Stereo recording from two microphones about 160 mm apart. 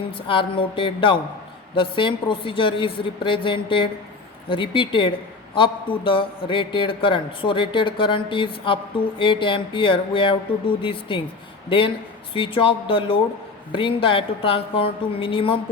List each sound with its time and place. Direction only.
0.1 s a man's voice: 35° left (ahead or behind)